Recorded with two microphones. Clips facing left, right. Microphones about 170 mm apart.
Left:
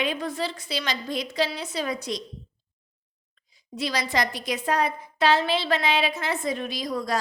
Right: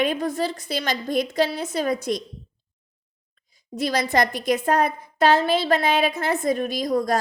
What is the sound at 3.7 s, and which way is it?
A woman's voice, 50° right (ahead or behind).